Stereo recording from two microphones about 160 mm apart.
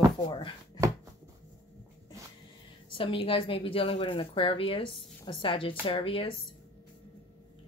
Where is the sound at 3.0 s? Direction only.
35° left (ahead or behind).